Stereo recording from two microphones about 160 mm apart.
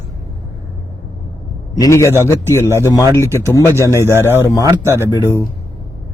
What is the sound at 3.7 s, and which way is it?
Speech, 15° right (ahead or behind).